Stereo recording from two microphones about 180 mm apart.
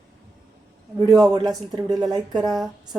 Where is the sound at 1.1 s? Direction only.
20° right (ahead or behind).